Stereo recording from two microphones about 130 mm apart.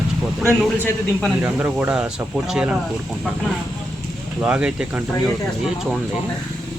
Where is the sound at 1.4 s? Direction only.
10° right (ahead or behind).